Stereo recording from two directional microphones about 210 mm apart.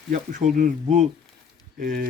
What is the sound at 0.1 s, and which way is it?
Speech, 40° right (ahead or behind).